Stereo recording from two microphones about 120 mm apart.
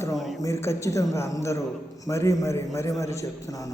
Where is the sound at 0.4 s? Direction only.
25° left (ahead or behind).